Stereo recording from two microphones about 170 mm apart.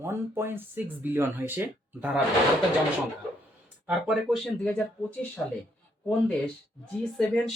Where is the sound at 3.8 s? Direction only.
5° right (ahead or behind).